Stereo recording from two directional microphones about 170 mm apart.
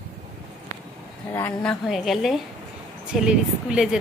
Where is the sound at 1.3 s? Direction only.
10° left (ahead or behind).